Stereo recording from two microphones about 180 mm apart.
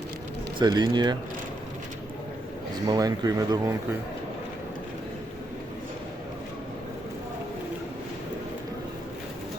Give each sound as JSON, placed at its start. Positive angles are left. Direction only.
{"t": 0.6, "sound": "speech", "side_deg": -25}
{"t": 2.8, "sound": "speech", "side_deg": -20}